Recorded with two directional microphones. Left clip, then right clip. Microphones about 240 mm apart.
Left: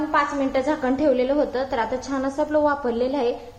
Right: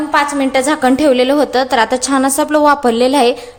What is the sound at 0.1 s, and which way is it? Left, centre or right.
A woman's voice, right.